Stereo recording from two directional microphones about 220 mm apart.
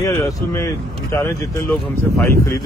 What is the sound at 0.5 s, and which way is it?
Speech, 10° left (ahead or behind).